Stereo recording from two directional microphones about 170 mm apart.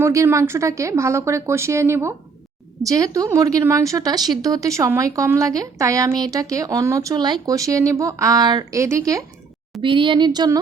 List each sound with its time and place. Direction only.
0.0 s a woman's voice: 15° right (ahead or behind)
9.8 s a woman's voice: 30° right (ahead or behind)